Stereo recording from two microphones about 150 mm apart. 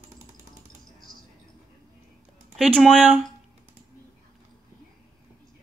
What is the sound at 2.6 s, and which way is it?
Speech, 5° right (ahead or behind).